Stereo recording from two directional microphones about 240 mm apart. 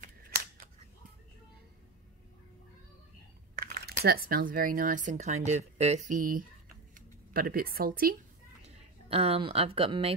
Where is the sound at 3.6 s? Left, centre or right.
Right.